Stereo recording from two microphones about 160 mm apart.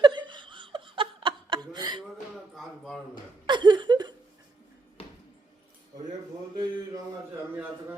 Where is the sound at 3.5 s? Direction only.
30° right (ahead or behind).